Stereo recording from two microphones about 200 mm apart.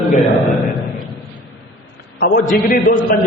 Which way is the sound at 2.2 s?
45° left (ahead or behind).